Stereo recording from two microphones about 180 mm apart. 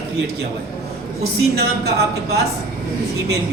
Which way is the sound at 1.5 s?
65° right (ahead or behind).